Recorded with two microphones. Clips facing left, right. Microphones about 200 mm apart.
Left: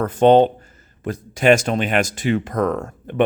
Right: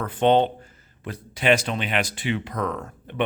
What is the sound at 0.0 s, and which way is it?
Speech, 45° left (ahead or behind).